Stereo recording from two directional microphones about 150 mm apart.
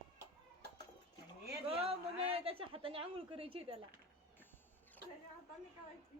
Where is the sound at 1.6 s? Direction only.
40° right (ahead or behind).